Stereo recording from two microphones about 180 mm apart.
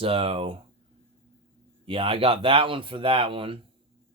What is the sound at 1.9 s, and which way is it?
Speech, 30° right (ahead or behind).